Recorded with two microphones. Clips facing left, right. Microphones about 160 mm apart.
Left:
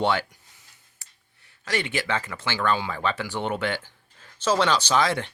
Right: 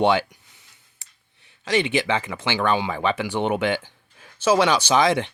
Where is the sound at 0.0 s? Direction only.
15° right (ahead or behind).